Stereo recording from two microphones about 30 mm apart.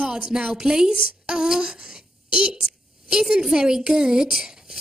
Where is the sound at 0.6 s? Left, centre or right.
Right.